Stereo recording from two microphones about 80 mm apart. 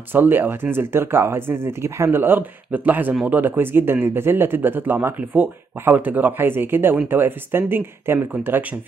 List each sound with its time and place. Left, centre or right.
0.1 s speech: right